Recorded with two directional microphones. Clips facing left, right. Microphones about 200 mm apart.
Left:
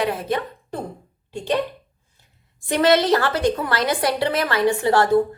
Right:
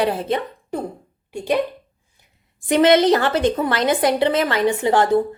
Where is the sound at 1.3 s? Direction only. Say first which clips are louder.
Right 2 dB; 10° right (ahead or behind).